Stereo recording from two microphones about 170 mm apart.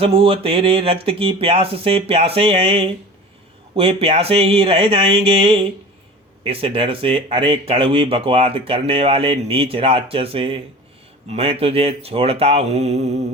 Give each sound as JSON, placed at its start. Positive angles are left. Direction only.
{"t": 0.0, "sound": "speech", "side_deg": -35}